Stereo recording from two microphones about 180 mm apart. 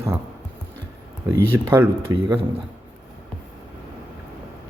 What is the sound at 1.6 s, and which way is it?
Speech, 10° right (ahead or behind).